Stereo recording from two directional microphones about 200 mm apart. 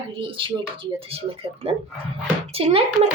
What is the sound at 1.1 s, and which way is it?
A woman's voice, 30° right (ahead or behind).